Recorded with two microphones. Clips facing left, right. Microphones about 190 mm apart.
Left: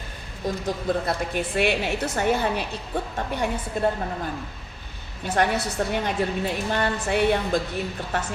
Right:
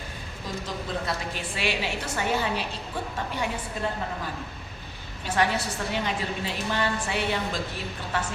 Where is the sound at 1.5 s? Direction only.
55° left (ahead or behind).